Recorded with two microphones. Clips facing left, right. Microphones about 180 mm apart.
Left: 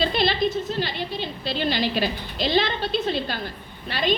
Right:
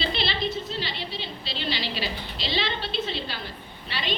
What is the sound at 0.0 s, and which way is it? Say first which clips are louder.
A woman's voice: left 6 dB; 45° left (ahead or behind).